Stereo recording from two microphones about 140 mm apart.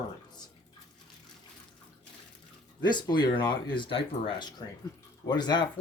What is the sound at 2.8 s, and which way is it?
Speech, 30° left (ahead or behind).